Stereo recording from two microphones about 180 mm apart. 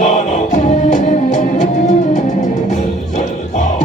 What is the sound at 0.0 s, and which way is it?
Music, 40° left (ahead or behind).